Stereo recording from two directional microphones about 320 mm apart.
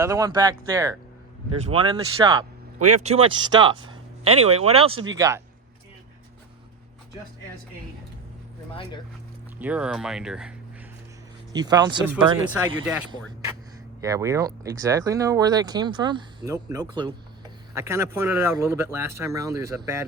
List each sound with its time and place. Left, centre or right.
0.0 s speech: centre
2.7 s a man's voice: right
3.0 s speech: centre
4.8 s speech: right
5.1 s speech: centre
9.6 s speech: centre
11.5 s speech: centre